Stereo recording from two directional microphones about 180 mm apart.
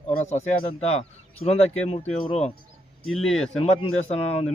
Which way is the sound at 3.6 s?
35° left (ahead or behind).